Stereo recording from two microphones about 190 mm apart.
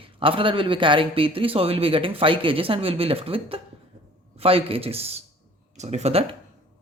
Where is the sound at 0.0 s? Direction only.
30° right (ahead or behind).